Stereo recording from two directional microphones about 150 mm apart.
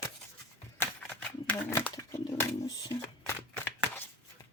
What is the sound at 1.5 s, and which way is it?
Speech, 10° left (ahead or behind).